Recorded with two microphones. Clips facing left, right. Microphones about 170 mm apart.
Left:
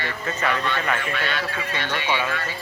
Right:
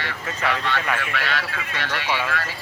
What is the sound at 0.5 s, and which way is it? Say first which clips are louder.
Speech: even; 75° right (ahead or behind).